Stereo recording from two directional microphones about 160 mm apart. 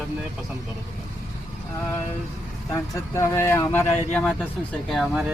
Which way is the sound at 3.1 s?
15° left (ahead or behind).